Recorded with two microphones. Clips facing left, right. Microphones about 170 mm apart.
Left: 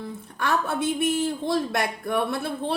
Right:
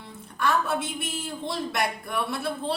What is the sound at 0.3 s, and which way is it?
A woman's voice, 55° left (ahead or behind).